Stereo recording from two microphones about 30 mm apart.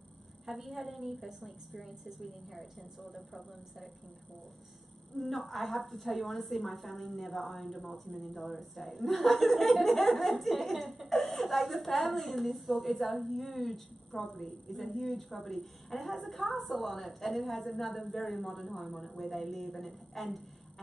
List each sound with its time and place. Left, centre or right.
0.5 s a woman's voice: centre
5.1 s a woman's voice: left
5.5 s a woman's voice: centre